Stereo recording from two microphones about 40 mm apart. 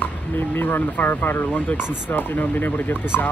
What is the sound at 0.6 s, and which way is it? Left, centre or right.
Speech, left.